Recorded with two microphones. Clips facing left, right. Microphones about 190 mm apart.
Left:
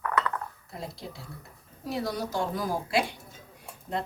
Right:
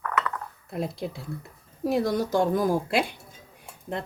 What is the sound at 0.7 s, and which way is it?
A woman's voice, 55° right (ahead or behind).